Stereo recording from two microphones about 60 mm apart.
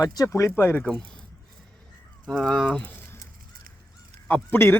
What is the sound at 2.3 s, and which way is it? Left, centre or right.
Speech, centre.